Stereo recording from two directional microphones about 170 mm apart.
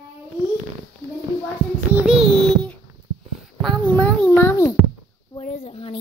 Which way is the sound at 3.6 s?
5° left (ahead or behind).